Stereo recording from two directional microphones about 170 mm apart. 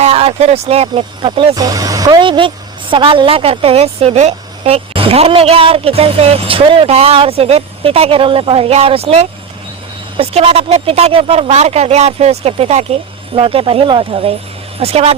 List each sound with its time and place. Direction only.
0.0 s a woman's voice: 40° right (ahead or behind)